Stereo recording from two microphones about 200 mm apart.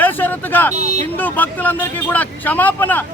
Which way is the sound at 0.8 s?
35° right (ahead or behind).